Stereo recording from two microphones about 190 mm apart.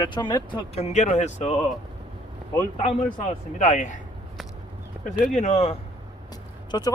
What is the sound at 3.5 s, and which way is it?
Speech, 40° left (ahead or behind).